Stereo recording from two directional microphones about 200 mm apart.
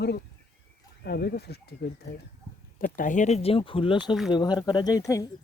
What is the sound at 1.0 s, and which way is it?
Speech, 50° left (ahead or behind).